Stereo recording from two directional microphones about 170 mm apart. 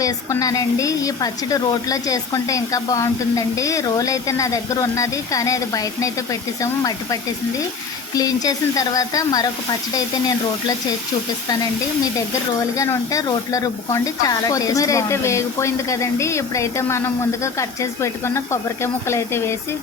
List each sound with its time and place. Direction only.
0.0 s a woman's voice: 20° left (ahead or behind)
12.7 s speech: 20° left (ahead or behind)